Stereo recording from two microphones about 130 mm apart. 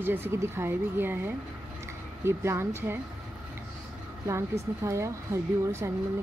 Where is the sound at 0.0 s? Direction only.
15° right (ahead or behind).